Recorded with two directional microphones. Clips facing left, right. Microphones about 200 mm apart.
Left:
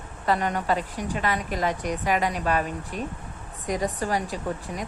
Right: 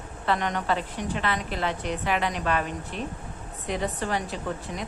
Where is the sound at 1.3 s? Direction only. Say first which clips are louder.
Left 2 dB; 10° left (ahead or behind).